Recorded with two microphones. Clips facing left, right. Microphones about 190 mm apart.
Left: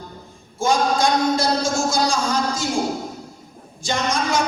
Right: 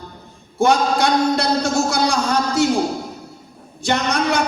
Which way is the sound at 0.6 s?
65° right (ahead or behind).